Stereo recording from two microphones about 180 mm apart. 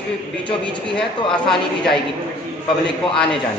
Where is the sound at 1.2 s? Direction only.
25° left (ahead or behind).